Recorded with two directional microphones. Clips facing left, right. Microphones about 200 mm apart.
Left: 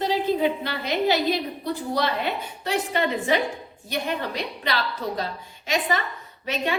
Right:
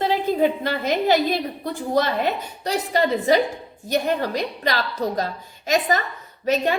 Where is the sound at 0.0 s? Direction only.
50° right (ahead or behind).